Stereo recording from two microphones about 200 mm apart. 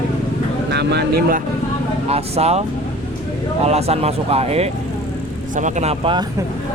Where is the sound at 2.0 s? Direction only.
30° right (ahead or behind).